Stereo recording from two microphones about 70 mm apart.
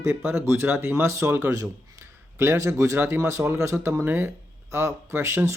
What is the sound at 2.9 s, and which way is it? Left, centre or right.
Speech, right.